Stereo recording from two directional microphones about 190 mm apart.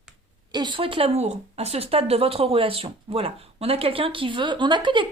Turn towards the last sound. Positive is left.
turn(degrees=-25)  # may be behind; listen again after turning